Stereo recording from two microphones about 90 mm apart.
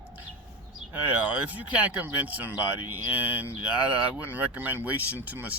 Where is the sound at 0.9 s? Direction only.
15° right (ahead or behind).